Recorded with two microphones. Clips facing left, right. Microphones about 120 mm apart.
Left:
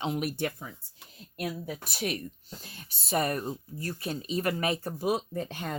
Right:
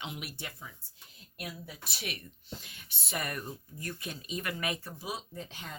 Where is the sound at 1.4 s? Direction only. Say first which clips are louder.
Left 9 dB; 45° left (ahead or behind).